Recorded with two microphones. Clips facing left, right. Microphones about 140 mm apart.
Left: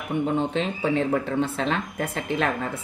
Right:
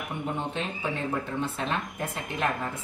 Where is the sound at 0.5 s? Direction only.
90° left.